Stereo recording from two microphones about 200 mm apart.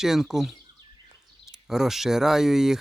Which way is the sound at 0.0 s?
Centre (ahead or behind).